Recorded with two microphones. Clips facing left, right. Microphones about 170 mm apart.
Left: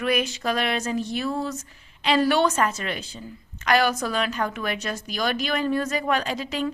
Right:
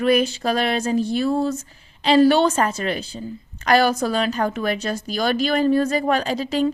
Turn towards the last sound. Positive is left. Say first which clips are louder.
# right 6 dB
turn(degrees=-30)  # may be behind; listen again after turning